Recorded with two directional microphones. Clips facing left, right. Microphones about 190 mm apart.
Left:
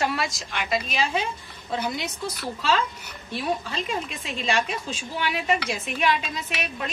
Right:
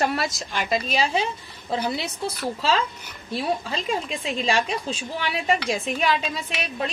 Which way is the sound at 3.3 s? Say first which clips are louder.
Right 2 dB; 35° right (ahead or behind).